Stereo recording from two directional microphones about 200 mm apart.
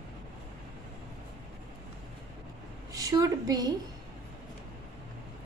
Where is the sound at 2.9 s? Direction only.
15° right (ahead or behind).